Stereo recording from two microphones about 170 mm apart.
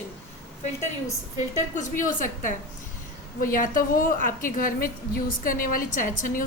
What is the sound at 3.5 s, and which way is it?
A woman's voice, 55° left (ahead or behind).